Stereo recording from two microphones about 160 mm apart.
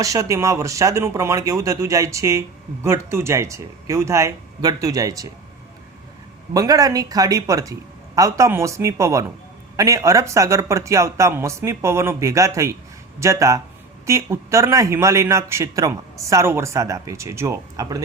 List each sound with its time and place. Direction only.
0.0 s speech: 20° right (ahead or behind)
6.5 s a man's voice: 20° right (ahead or behind)